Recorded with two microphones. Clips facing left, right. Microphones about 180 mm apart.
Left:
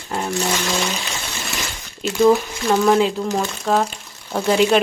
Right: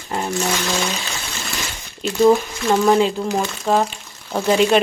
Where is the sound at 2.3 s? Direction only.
Centre (ahead or behind).